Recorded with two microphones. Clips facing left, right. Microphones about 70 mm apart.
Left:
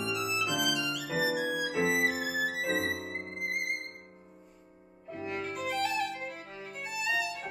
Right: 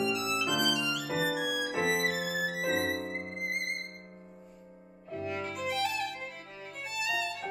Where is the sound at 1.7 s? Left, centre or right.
Right.